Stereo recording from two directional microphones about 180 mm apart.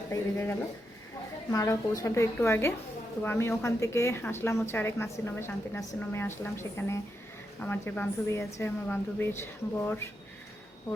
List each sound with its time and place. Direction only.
0.1 s a woman's voice: 10° left (ahead or behind)